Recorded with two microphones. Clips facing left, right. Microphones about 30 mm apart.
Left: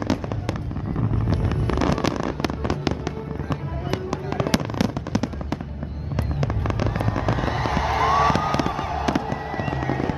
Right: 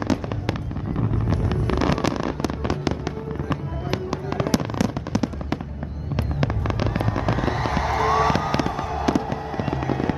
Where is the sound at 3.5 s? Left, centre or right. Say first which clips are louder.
Even; centre.